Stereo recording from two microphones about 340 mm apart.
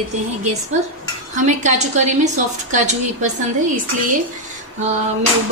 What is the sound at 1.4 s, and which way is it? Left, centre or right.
A woman's voice, right.